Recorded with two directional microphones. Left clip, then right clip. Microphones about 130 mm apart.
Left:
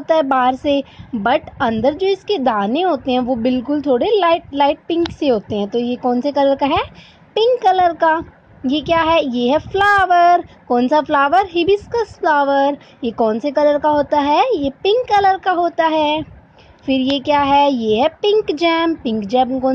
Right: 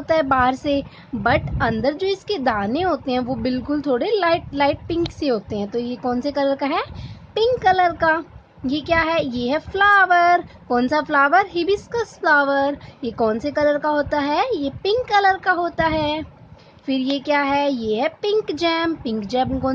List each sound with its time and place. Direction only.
0.0 s a woman's voice: 15° left (ahead or behind)
9.2 s a woman's voice: 35° right (ahead or behind)
9.5 s a woman's voice: 15° left (ahead or behind)
11.4 s a woman's voice: 40° right (ahead or behind)
11.7 s a woman's voice: 15° left (ahead or behind)